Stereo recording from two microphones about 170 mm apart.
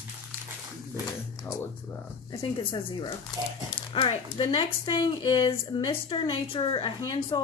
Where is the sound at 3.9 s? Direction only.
35° left (ahead or behind).